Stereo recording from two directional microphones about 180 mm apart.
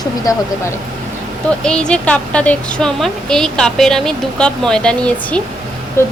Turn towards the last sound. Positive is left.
turn(degrees=15)  # may be behind; listen again after turning